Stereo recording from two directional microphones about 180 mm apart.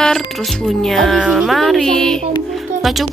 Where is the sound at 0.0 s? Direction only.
Centre (ahead or behind).